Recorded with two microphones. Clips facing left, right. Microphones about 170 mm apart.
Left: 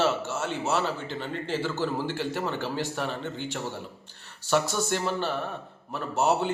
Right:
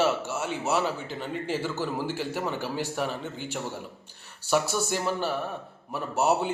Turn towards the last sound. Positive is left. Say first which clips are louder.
# even
turn(degrees=-10)  # may be behind; listen again after turning